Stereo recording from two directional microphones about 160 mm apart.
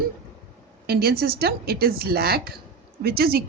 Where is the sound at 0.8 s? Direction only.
75° right (ahead or behind).